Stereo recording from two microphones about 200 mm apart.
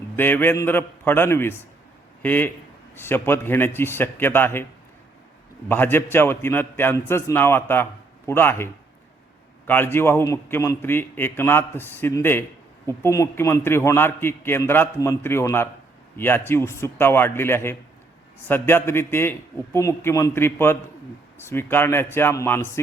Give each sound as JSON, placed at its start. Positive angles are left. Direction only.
{"t": 0.2, "sound": "a man's voice", "side_deg": 10}
{"t": 5.6, "sound": "a man's voice", "side_deg": 10}